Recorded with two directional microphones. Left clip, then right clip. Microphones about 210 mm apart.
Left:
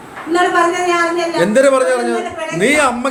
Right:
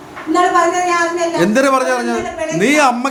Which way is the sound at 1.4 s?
20° right (ahead or behind).